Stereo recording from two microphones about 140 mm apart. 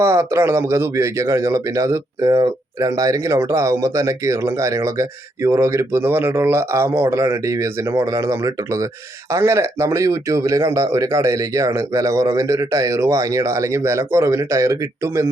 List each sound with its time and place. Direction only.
0.0 s speech: 20° right (ahead or behind)